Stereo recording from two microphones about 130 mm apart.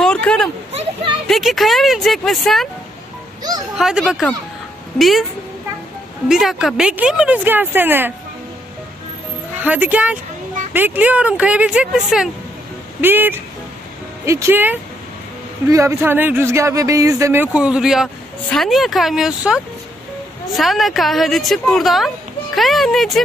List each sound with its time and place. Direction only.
0.0 s a sound: 5° left (ahead or behind)
1.2 s speech: centre (ahead or behind)
3.7 s speech: 5° right (ahead or behind)
6.2 s speech: 5° right (ahead or behind)
9.6 s speech: 10° right (ahead or behind)
13.0 s speech: 15° right (ahead or behind)
17.5 s speech: 5° right (ahead or behind)